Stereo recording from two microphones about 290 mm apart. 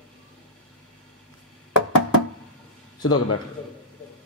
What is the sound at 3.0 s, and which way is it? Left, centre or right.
Speech, left.